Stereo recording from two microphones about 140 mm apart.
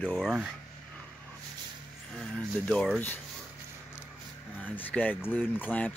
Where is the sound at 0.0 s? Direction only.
Centre (ahead or behind).